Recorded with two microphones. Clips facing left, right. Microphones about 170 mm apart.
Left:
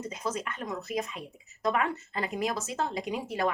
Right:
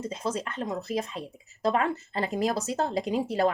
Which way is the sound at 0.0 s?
30° right (ahead or behind).